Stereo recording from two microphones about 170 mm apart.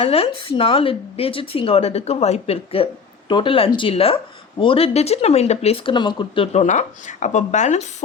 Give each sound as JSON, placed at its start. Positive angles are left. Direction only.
{"t": 0.0, "sound": "a woman's voice", "side_deg": 35}